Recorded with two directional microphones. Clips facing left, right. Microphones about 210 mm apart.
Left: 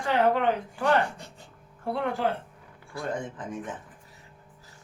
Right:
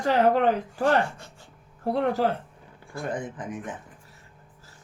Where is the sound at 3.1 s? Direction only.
15° right (ahead or behind).